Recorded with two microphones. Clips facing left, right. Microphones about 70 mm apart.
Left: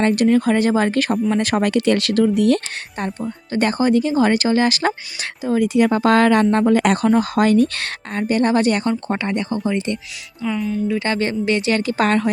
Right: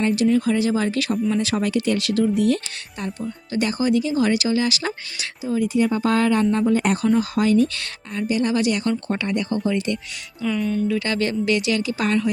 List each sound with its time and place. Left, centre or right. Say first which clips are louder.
0.0 s speech: left 3 dB; left
3.0 s speech: left 3 dB; left
5.5 s speech: left 4 dB; left
8.8 s speech: left 2 dB; left
10.6 s speech: even; centre
10.8 s speech: left 2 dB; left